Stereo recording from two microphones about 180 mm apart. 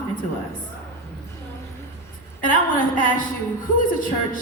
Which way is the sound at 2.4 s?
50° left (ahead or behind).